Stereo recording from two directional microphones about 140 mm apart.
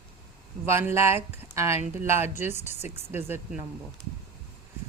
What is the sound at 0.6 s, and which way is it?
Speech, 20° right (ahead or behind).